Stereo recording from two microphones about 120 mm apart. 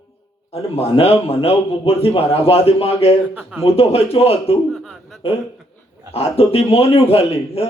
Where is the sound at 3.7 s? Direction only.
55° left (ahead or behind).